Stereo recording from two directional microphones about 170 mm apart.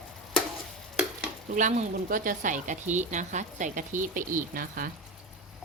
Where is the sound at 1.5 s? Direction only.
45° right (ahead or behind).